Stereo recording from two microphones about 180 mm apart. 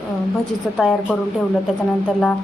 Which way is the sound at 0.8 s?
Centre (ahead or behind).